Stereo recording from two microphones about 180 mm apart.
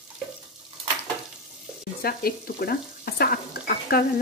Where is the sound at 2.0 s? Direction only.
55° left (ahead or behind).